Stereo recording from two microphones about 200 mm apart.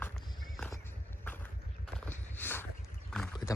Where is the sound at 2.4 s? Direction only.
10° left (ahead or behind).